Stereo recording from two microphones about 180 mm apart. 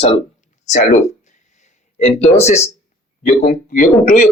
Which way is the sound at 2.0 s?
40° left (ahead or behind).